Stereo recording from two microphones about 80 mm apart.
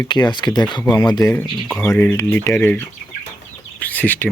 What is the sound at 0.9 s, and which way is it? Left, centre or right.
Speech, left.